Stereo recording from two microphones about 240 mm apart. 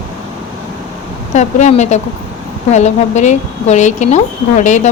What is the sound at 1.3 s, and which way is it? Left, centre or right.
Speech, left.